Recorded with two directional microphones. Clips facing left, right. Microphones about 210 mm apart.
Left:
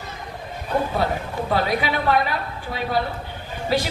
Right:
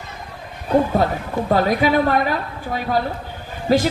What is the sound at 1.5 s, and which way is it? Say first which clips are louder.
A woman's voice: right 6 dB; 45° right (ahead or behind).